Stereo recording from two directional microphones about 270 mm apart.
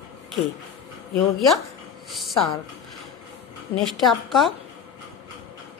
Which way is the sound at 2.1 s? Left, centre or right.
Centre.